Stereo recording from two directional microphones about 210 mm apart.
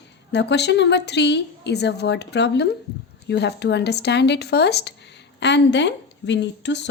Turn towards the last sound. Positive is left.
turn(degrees=55)  # may be behind; listen again after turning